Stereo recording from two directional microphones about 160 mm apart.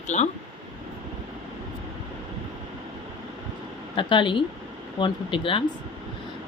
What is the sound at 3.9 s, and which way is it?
Speech, 30° left (ahead or behind).